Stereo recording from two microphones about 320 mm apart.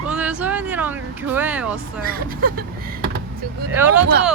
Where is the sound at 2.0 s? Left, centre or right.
Right.